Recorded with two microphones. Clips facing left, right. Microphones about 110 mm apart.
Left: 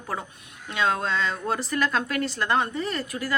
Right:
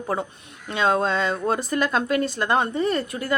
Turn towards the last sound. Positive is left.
turn(degrees=-25)  # may be behind; listen again after turning